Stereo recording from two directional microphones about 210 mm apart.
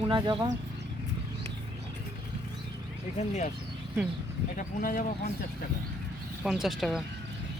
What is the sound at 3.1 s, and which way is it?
Speech, 35° left (ahead or behind).